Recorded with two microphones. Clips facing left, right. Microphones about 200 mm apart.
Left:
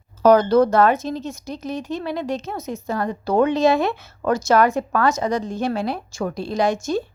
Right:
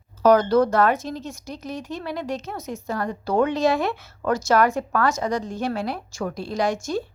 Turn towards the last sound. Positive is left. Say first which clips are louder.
# left 3 dB
turn(degrees=20)  # may be behind; listen again after turning